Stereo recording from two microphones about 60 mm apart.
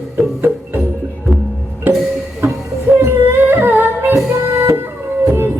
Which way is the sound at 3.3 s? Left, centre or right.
Right.